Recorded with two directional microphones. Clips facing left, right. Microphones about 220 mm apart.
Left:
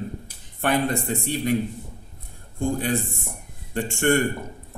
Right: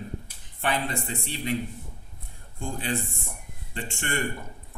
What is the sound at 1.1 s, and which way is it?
Speech, 50° left (ahead or behind).